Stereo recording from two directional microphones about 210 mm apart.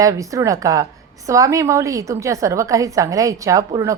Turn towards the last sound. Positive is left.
turn(degrees=-15)  # may be behind; listen again after turning